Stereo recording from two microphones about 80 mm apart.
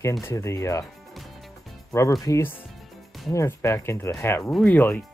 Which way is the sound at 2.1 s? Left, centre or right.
Left.